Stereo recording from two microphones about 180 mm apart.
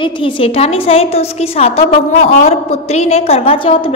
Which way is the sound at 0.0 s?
30° left (ahead or behind).